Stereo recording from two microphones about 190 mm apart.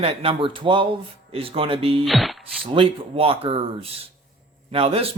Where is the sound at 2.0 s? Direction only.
Centre (ahead or behind).